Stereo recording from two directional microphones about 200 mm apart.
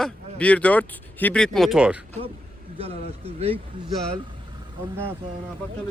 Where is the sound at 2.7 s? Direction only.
30° right (ahead or behind).